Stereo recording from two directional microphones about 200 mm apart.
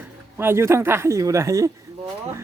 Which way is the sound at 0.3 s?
10° right (ahead or behind).